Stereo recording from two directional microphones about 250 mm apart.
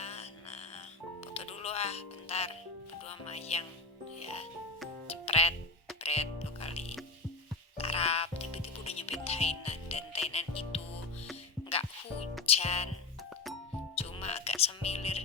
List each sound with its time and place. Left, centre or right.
0.0 s frog: left
1.3 s music: left
3.1 s speech: left
4.2 s music: left
12.5 s music: left
13.9 s music: left